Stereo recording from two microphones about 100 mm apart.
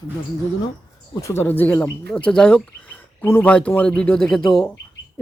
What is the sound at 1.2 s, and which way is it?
Speech, 25° left (ahead or behind).